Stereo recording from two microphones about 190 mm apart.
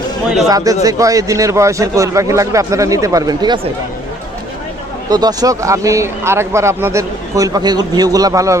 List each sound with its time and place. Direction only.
0.4 s speech: 20° right (ahead or behind)
5.0 s speech: 20° right (ahead or behind)